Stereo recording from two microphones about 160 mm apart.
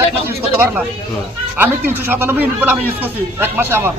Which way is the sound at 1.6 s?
15° right (ahead or behind).